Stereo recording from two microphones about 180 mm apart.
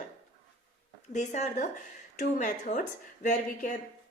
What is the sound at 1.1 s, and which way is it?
A woman's voice, 40° left (ahead or behind).